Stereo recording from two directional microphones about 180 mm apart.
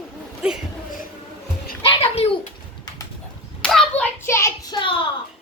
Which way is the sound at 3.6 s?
5° left (ahead or behind).